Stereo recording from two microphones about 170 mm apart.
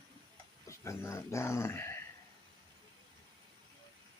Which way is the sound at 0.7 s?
15° left (ahead or behind).